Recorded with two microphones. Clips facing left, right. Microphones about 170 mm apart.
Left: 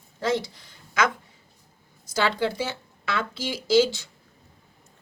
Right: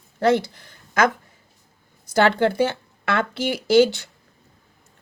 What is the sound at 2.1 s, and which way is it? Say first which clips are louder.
Speech: right 7 dB; 60° right (ahead or behind).